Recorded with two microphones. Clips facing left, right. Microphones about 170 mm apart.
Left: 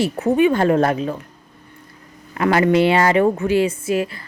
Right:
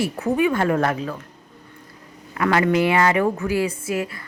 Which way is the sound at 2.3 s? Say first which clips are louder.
Left 3 dB; 30° left (ahead or behind).